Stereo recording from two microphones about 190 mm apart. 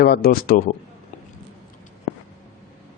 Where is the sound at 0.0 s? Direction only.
55° left (ahead or behind).